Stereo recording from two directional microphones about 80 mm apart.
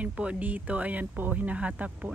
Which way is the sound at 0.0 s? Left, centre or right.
Centre.